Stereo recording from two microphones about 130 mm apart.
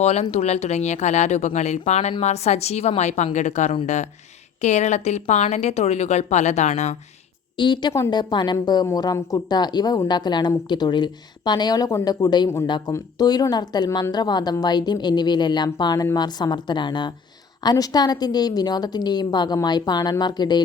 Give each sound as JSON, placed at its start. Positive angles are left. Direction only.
{"t": 0.0, "sound": "a woman's voice", "side_deg": 55}
{"t": 7.5, "sound": "a woman's voice", "side_deg": 35}